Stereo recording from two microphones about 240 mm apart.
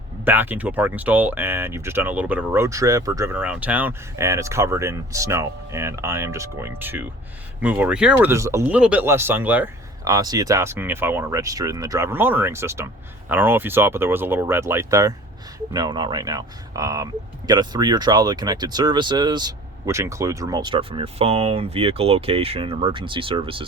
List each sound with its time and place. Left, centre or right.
0.3 s speech: centre